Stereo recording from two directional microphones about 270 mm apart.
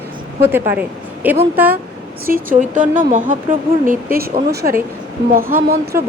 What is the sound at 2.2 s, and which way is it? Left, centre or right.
A woman's voice, right.